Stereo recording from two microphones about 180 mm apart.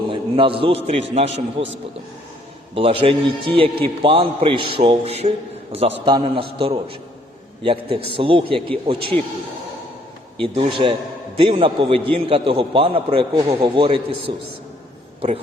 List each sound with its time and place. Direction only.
0.1 s a man's voice: 30° right (ahead or behind)
2.7 s a man's voice: 30° right (ahead or behind)
10.4 s a man's voice: 30° right (ahead or behind)